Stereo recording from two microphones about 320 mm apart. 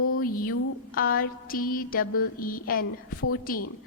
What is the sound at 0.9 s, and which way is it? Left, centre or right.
A woman's voice, left.